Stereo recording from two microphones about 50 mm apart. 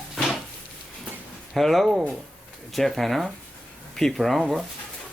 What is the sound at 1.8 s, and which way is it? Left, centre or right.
Speech, centre.